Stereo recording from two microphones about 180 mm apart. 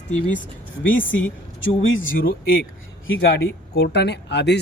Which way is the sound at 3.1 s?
70° left (ahead or behind).